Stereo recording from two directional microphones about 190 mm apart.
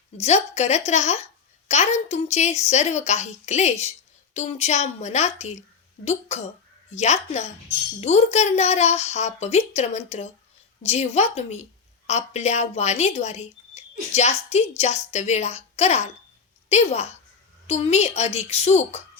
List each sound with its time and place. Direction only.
0.2 s a woman's voice: 35° left (ahead or behind)